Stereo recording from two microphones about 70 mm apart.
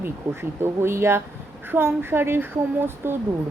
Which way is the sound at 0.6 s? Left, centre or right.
Right.